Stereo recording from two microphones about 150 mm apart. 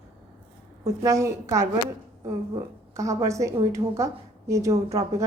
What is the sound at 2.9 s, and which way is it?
A woman's voice, 20° right (ahead or behind).